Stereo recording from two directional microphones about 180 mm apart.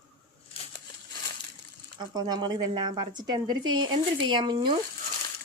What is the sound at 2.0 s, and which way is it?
Speech, 20° right (ahead or behind).